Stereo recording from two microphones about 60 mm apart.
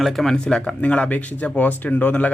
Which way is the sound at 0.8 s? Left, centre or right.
Left.